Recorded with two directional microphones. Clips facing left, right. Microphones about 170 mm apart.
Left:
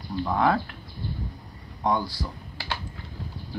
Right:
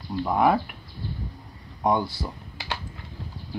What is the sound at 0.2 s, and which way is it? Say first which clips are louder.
Speech: right 2 dB; 15° right (ahead or behind).